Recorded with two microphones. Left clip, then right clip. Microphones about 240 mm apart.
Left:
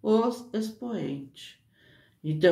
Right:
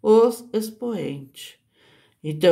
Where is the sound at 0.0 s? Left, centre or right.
Right.